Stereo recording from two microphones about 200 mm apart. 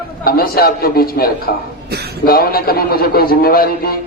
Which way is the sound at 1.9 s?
55° right (ahead or behind).